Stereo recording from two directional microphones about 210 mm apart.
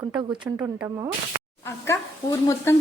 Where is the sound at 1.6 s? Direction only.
15° left (ahead or behind).